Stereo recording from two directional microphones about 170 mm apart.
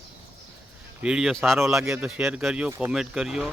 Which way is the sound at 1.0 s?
5° right (ahead or behind).